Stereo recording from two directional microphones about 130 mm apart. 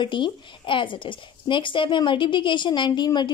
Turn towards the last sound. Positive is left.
turn(degrees=35)  # may be behind; listen again after turning